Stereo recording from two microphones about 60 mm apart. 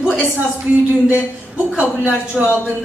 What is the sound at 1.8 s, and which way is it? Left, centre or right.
Speech, left.